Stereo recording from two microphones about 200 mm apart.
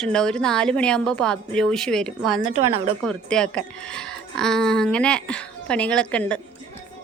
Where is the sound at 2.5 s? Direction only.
30° right (ahead or behind).